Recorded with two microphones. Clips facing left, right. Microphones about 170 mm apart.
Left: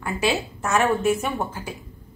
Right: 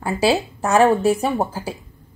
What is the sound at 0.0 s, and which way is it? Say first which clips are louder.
A woman's voice: right 5 dB; 35° right (ahead or behind).